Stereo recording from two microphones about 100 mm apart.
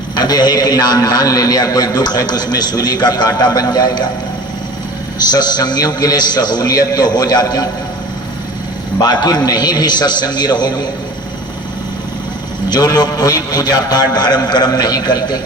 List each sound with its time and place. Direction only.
0.2 s a man's voice: 40° left (ahead or behind)
5.2 s a man's voice: 40° left (ahead or behind)
9.0 s a man's voice: 40° left (ahead or behind)
12.7 s a man's voice: 40° left (ahead or behind)